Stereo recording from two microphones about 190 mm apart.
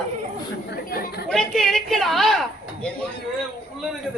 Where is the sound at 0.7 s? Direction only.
55° left (ahead or behind).